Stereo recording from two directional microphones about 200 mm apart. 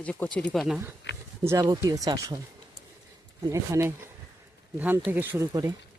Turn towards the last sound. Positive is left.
turn(degrees=-15)  # may be behind; listen again after turning